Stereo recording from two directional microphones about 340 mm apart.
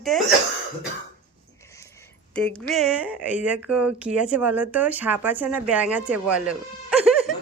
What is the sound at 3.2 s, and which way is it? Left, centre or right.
Speech, centre.